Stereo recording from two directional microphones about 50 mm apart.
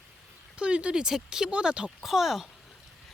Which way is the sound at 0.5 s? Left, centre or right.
Right.